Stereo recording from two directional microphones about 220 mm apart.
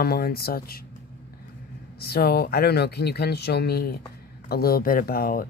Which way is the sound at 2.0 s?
45° left (ahead or behind).